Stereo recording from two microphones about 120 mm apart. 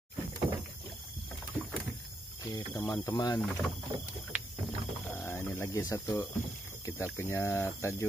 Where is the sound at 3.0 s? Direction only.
30° left (ahead or behind).